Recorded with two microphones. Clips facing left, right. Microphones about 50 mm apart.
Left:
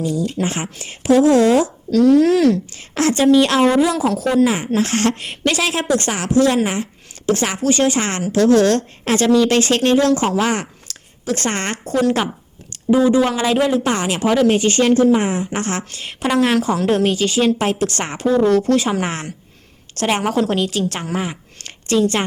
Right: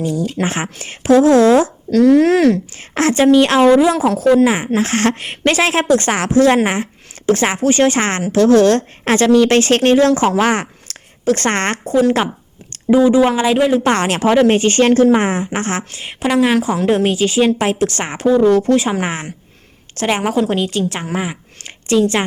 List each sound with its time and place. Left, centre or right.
0.0 s a woman's voice: right
11.9 s speech: right
13.9 s a woman's voice: right
15.5 s speech: right
16.2 s a woman's voice: centre